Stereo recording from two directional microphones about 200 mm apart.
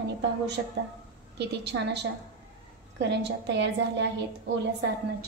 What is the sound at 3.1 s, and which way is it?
Speech, 60° right (ahead or behind).